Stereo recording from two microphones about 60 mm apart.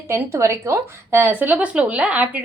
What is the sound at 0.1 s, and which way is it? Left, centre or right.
A woman's voice, right.